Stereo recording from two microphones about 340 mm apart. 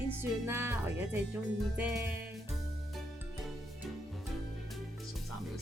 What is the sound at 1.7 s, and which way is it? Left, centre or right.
Speech, centre.